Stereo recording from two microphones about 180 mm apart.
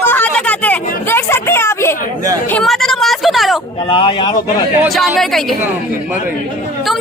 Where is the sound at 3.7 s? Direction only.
30° left (ahead or behind).